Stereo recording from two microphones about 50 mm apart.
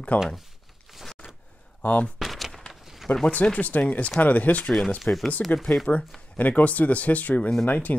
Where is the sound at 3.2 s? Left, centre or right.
Left.